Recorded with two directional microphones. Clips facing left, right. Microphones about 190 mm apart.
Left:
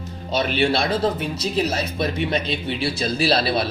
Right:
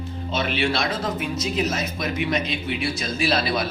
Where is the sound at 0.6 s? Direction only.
35° left (ahead or behind).